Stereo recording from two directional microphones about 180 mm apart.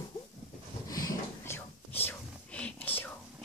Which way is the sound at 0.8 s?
20° left (ahead or behind).